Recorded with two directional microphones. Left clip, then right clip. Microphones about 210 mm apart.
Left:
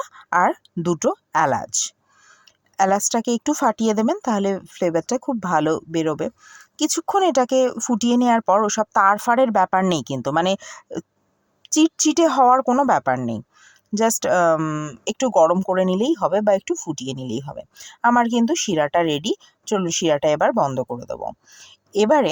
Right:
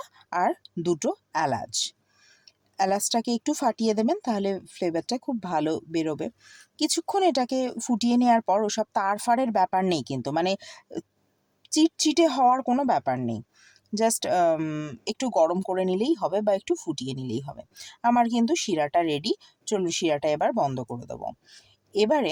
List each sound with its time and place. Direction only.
0.0 s speech: 15° left (ahead or behind)
2.7 s speech: 15° left (ahead or behind)